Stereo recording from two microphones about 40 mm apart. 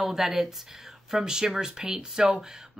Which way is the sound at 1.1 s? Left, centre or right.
Centre.